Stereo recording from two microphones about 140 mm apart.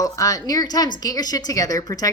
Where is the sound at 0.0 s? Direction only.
25° left (ahead or behind).